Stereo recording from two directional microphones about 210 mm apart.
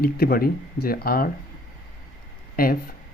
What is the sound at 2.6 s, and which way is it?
Speech, 45° left (ahead or behind).